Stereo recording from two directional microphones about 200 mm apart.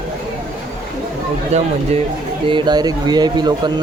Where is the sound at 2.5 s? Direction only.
25° right (ahead or behind).